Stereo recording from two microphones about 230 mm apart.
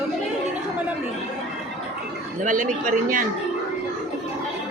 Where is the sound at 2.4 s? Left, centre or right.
Right.